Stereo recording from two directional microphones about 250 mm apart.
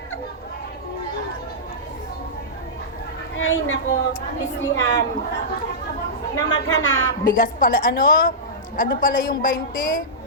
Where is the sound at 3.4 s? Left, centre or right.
Left.